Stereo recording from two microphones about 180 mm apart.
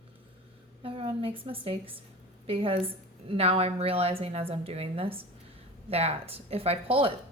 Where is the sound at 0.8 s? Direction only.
30° right (ahead or behind).